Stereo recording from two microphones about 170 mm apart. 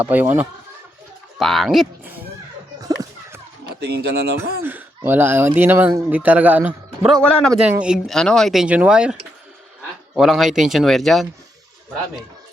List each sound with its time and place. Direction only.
0.0 s speech: 10° right (ahead or behind)
2.8 s a sound: 20° right (ahead or behind)
3.8 s speech: 75° right (ahead or behind)
4.6 s speech: 10° right (ahead or behind)
7.2 s speech: 5° left (ahead or behind)
7.6 s speech: 5° right (ahead or behind)
10.2 s speech: centre (ahead or behind)